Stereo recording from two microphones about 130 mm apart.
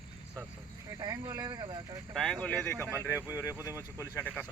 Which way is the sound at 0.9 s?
30° right (ahead or behind).